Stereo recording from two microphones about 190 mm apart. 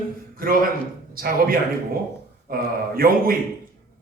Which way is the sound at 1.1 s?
50° right (ahead or behind).